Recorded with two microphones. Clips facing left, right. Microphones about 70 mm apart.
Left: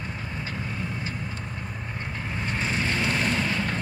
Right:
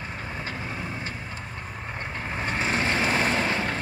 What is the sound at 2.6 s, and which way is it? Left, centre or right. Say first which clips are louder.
Vehicle: right 2 dB; right.